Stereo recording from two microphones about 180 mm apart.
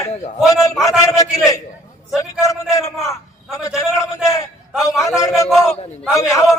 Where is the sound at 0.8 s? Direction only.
20° left (ahead or behind).